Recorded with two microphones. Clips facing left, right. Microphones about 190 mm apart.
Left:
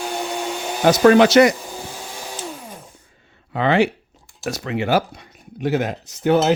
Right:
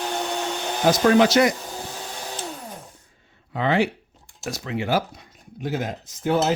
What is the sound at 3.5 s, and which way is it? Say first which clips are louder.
Speech: left 4 dB; 75° left (ahead or behind).